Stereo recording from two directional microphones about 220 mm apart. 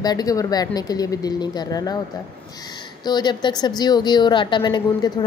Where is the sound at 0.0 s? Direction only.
15° left (ahead or behind).